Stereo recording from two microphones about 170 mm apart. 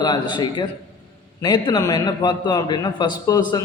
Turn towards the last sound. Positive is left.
turn(degrees=25)  # may be behind; listen again after turning